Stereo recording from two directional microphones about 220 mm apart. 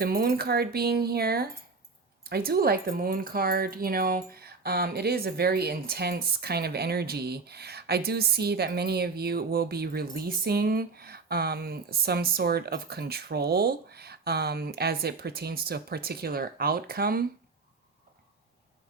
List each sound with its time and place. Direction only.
0.0 s speech: 45° right (ahead or behind)